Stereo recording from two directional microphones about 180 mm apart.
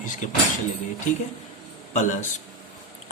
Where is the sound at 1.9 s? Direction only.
45° left (ahead or behind).